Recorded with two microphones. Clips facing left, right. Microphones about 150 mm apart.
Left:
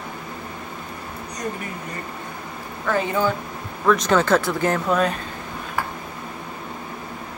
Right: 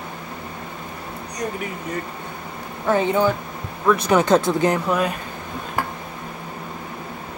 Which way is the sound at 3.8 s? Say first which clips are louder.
Right 1 dB; 10° right (ahead or behind).